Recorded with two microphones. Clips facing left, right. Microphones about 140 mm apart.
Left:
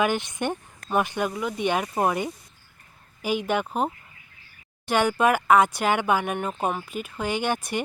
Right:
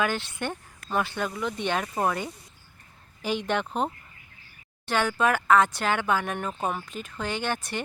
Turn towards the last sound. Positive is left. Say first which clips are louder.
# left 4 dB
turn(degrees=15)  # may be behind; listen again after turning